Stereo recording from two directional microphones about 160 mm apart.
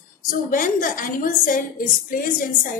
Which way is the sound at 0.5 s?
55° left (ahead or behind).